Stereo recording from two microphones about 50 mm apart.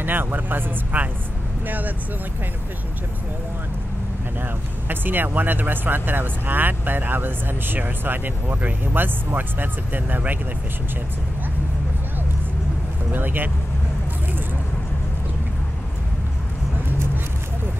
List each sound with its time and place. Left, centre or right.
0.0 s speech: right
4.8 s speech: right
13.1 s speech: right